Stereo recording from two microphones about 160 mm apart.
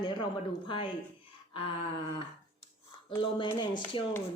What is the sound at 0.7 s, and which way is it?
Speech, 30° left (ahead or behind).